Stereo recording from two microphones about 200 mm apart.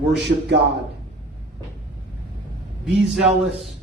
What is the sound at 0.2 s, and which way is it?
Speech, 60° right (ahead or behind).